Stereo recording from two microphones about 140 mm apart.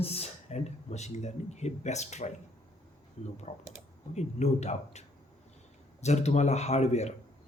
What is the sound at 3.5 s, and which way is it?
Speech, 55° left (ahead or behind).